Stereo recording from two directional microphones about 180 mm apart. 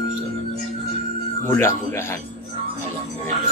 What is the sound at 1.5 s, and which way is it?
Speech, 15° left (ahead or behind).